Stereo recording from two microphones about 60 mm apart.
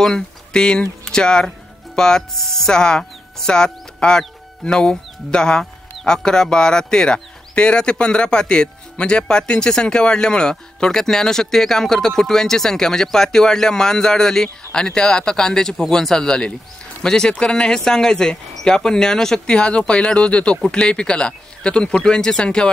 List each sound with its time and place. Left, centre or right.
0.0 s speech: centre